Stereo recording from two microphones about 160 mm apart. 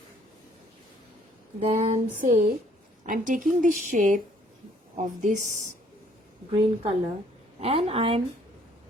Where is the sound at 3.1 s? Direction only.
55° right (ahead or behind).